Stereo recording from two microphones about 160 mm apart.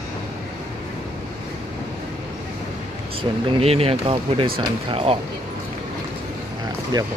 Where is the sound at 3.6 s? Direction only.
40° right (ahead or behind).